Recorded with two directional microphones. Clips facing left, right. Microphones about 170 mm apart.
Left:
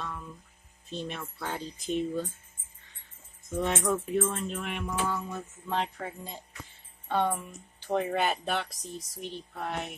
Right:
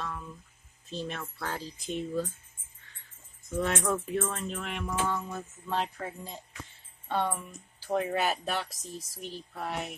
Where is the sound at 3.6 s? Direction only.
Centre (ahead or behind).